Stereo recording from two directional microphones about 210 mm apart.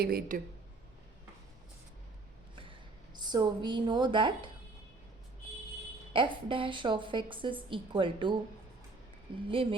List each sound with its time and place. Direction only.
0.0 s speech: 45° right (ahead or behind)
3.2 s a woman's voice: 20° right (ahead or behind)
6.1 s a woman's voice: 25° right (ahead or behind)
9.5 s a woman's voice: 25° right (ahead or behind)